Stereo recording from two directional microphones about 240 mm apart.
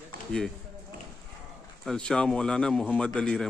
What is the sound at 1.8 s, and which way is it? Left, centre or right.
Speech, centre.